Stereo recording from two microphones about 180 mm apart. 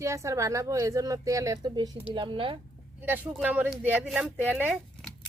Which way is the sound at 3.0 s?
10° right (ahead or behind).